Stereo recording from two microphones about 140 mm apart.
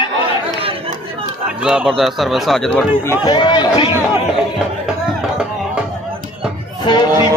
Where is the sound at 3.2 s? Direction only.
35° left (ahead or behind).